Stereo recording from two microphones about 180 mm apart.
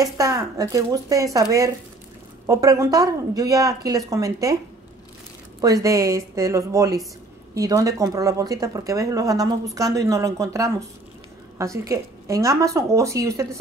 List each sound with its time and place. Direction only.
0.0 s speech: 20° right (ahead or behind)
5.6 s speech: 20° right (ahead or behind)